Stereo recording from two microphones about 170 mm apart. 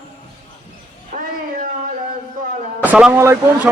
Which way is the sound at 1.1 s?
55° right (ahead or behind).